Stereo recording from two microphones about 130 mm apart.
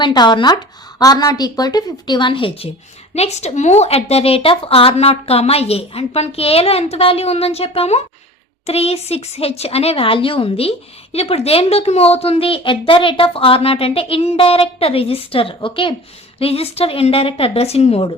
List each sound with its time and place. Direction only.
0.0 s speech: 35° left (ahead or behind)
3.2 s a woman's voice: 55° left (ahead or behind)